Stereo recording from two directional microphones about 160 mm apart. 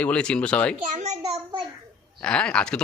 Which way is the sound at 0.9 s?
45° right (ahead or behind).